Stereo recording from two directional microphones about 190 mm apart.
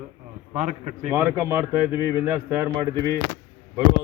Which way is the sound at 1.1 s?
15° right (ahead or behind).